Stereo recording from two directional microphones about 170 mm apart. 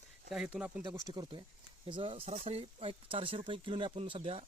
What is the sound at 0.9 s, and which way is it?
Speech, 20° right (ahead or behind).